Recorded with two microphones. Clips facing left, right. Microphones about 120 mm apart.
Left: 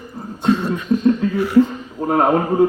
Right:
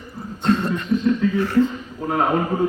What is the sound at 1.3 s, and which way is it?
Speech, 10° left (ahead or behind).